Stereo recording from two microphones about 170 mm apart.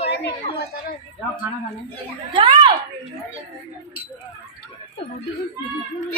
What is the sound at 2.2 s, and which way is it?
Speech, 30° right (ahead or behind).